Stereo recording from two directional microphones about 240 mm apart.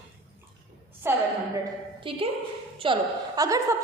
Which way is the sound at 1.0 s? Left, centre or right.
Centre.